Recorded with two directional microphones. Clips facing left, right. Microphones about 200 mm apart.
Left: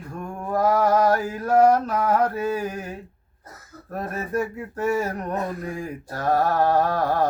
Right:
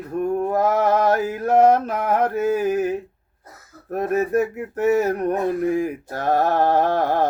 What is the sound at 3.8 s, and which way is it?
Male singing, 20° right (ahead or behind).